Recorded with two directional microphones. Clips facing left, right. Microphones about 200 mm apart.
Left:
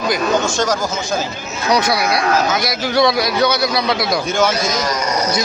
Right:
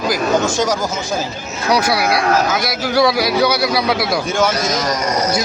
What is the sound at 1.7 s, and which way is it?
A man's voice, 5° right (ahead or behind).